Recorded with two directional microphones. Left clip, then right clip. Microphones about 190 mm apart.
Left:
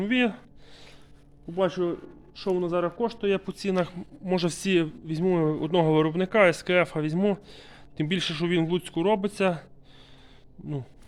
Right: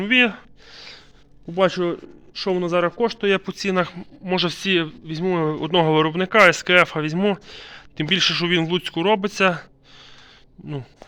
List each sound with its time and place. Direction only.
0.0 s a sound: 5° left (ahead or behind)
1.5 s a man's voice: 30° right (ahead or behind); by 4.4 s centre (ahead or behind)
4.4 s speech: 15° left (ahead or behind); by 10.1 s centre (ahead or behind)